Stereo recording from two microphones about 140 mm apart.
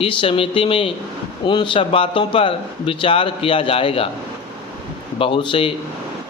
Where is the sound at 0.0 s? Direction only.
40° left (ahead or behind).